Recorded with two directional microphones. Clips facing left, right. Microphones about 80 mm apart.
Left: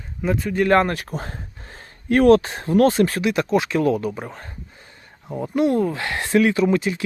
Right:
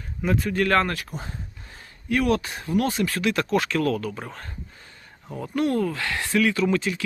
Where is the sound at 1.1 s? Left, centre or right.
Left.